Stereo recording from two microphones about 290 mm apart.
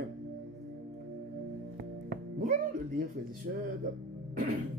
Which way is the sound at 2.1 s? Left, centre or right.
Right.